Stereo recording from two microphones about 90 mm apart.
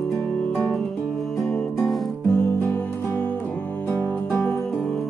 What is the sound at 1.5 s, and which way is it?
Music, 10° left (ahead or behind).